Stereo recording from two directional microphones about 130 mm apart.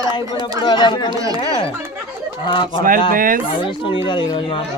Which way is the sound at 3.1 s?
90° right.